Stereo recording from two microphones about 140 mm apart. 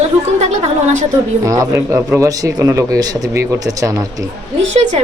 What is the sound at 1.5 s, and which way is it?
A man's voice, 25° right (ahead or behind).